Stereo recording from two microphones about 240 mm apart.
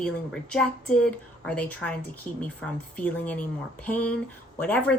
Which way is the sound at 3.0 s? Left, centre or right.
Centre.